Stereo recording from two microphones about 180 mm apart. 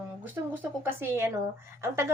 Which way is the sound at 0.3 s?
10° right (ahead or behind).